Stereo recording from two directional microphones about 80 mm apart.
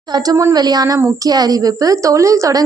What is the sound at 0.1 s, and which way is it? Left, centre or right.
A woman's voice, right.